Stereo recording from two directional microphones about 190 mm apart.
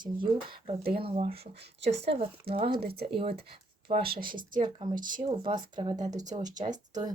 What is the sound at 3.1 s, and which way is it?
Speech, 30° right (ahead or behind).